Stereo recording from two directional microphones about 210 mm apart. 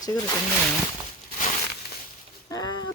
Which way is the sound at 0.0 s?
15° left (ahead or behind).